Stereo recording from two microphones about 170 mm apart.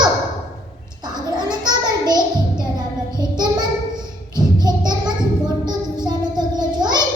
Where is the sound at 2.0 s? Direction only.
25° right (ahead or behind).